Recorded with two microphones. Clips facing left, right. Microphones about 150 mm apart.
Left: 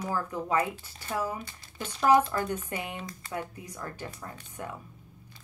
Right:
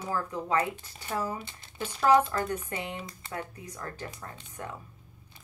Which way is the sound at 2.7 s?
30° right (ahead or behind).